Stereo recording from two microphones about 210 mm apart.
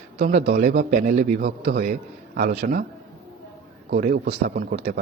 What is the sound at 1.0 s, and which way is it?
Speech, 35° right (ahead or behind).